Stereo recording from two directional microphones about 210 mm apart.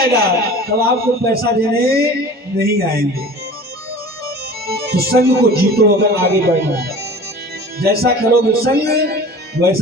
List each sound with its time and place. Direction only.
0.0 s speech: 50° right (ahead or behind)
4.6 s speech: 50° right (ahead or behind)